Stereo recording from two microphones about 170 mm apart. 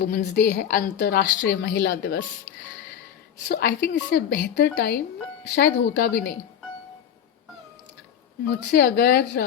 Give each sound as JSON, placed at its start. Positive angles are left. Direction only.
{"t": 0.0, "sound": "a woman's voice", "side_deg": 70}
{"t": 3.5, "sound": "a woman's voice", "side_deg": 70}
{"t": 3.8, "sound": "a woman's voice", "side_deg": 90}
{"t": 8.4, "sound": "a woman's voice", "side_deg": 70}